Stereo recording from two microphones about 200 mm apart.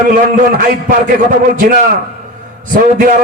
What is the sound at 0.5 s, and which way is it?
Speech, 45° right (ahead or behind).